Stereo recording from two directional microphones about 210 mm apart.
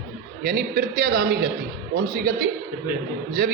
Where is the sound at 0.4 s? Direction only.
45° right (ahead or behind).